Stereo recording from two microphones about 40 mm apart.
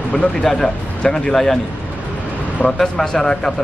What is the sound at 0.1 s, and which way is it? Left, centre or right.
A man's voice, centre.